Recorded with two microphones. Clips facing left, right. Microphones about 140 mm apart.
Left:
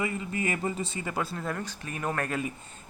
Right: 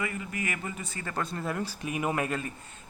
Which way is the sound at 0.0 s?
25° left (ahead or behind).